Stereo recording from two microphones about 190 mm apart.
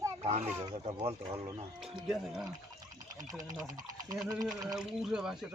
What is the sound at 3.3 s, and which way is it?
Speech, 20° right (ahead or behind).